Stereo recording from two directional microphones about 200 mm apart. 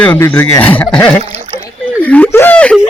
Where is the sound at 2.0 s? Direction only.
5° left (ahead or behind).